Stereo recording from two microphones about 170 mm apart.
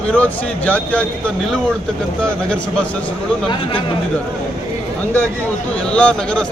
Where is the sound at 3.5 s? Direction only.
30° left (ahead or behind).